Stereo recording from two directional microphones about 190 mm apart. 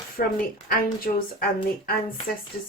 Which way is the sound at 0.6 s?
50° left (ahead or behind).